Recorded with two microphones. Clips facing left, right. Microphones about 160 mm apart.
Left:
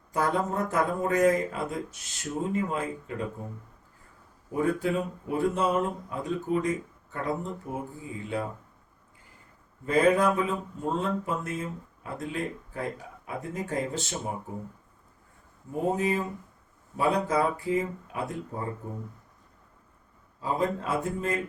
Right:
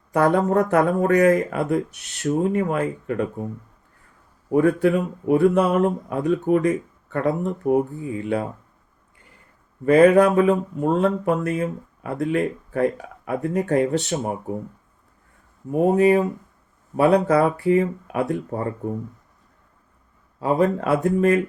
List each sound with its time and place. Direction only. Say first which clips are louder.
0.1 s speech: right 9 dB; 65° right (ahead or behind)
4.5 s speech: right 9 dB; 65° right (ahead or behind)
9.8 s speech: right 9 dB; 70° right (ahead or behind)
15.7 s speech: right 11 dB; 70° right (ahead or behind)
20.4 s speech: right 8 dB; 65° right (ahead or behind)